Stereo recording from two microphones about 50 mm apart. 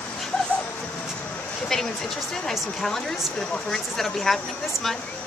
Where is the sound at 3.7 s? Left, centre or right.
Centre.